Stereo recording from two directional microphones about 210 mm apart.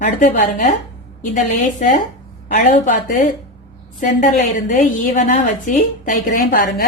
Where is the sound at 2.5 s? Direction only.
40° left (ahead or behind).